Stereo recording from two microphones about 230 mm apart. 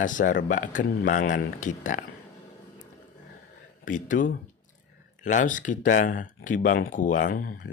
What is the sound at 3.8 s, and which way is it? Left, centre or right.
A man's voice, left.